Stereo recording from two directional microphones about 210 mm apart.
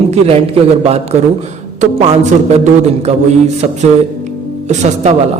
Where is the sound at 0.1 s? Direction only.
30° right (ahead or behind).